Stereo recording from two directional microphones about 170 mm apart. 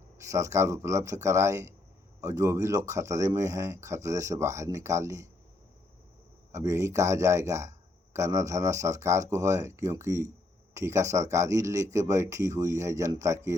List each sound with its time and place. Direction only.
0.2 s speech: 20° right (ahead or behind)
6.5 s speech: 15° right (ahead or behind)